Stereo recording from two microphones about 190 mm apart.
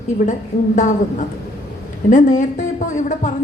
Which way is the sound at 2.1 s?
40° left (ahead or behind).